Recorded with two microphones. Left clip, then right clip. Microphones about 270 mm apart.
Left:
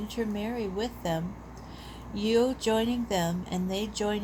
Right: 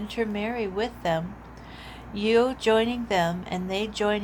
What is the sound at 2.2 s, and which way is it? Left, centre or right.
Speech, centre.